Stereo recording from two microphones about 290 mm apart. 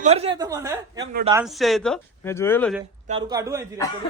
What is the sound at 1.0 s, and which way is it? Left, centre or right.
Speech, right.